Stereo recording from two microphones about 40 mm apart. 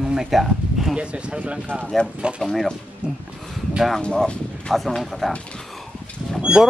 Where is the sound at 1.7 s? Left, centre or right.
Right.